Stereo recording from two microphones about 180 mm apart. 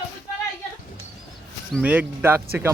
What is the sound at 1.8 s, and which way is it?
Speech, 10° right (ahead or behind).